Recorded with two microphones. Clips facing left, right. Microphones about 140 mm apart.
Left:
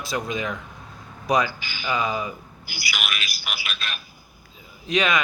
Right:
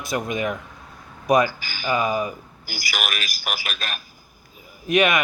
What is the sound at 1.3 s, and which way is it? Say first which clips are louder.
A man's voice: right 4 dB; 45° right (ahead or behind).